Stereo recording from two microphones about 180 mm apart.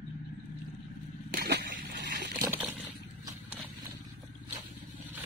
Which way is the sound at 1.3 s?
60° right (ahead or behind).